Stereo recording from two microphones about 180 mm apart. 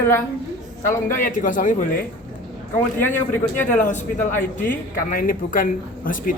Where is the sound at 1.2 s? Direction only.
45° left (ahead or behind).